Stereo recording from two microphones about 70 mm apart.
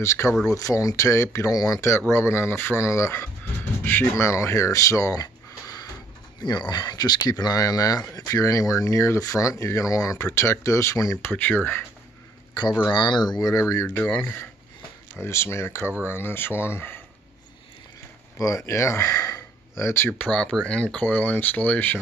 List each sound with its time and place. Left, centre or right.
0.0 s speech: left
0.5 s speech: left
2.0 s speech: left
3.8 s speech: left
4.3 s speech: left
6.4 s speech: left
11.2 s speech: left
12.8 s speech: left
13.8 s speech: left
15.1 s speech: left
18.4 s speech: left
20.2 s speech: centre